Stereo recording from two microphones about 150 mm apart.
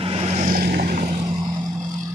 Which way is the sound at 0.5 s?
90° right.